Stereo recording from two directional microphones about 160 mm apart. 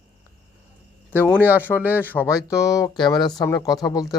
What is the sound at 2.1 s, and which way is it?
Speech, 20° left (ahead or behind).